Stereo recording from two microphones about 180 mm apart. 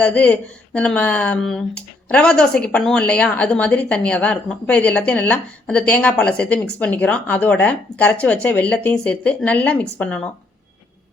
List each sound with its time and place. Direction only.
0.0 s speech: 10° left (ahead or behind)